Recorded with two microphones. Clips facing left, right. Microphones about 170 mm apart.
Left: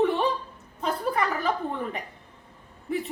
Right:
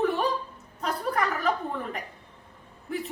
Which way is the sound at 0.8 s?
Centre (ahead or behind).